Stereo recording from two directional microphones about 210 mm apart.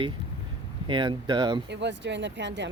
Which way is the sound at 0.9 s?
25° right (ahead or behind).